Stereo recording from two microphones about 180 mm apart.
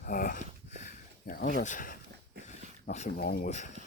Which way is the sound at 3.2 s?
60° left (ahead or behind).